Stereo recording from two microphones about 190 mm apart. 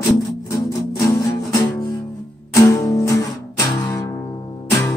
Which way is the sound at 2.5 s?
15° left (ahead or behind).